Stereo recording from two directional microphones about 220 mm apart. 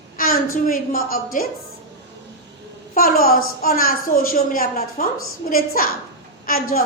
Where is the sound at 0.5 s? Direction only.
40° left (ahead or behind).